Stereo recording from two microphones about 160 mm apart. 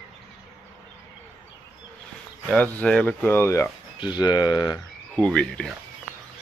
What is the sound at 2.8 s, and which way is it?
Speech, 5° left (ahead or behind).